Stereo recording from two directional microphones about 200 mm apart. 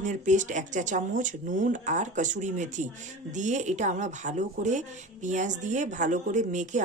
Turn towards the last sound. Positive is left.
turn(degrees=-35)  # may be behind; listen again after turning